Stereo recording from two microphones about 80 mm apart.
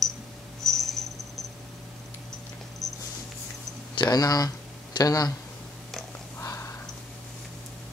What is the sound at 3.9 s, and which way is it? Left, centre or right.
Speech, left.